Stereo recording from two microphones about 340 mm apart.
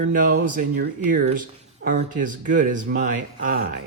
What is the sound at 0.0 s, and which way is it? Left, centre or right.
Speech, right.